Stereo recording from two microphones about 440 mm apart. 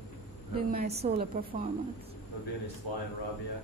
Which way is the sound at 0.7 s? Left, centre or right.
Centre.